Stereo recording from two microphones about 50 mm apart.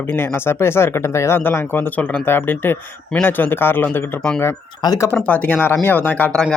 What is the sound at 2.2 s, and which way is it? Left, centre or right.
Speech, left.